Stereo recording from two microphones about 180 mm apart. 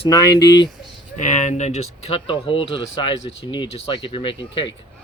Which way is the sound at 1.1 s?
40° left (ahead or behind).